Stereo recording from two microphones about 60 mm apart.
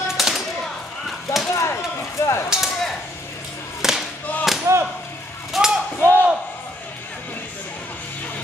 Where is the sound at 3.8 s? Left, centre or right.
Centre.